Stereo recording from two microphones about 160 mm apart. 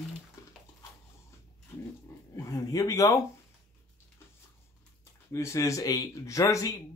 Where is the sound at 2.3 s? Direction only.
20° left (ahead or behind).